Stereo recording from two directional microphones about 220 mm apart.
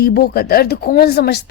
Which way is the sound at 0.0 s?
45° left (ahead or behind).